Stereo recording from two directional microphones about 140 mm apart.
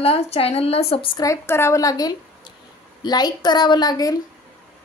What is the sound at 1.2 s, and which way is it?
A woman's voice, 20° left (ahead or behind).